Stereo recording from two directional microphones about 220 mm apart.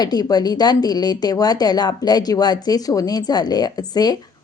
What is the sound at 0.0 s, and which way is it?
Speech, 20° left (ahead or behind).